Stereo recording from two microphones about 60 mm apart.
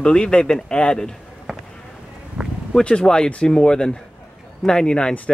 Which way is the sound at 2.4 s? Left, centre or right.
Centre.